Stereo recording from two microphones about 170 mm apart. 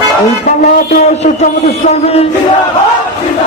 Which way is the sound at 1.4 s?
40° left (ahead or behind).